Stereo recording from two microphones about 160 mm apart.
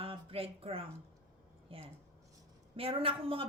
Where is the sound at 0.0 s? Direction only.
35° right (ahead or behind).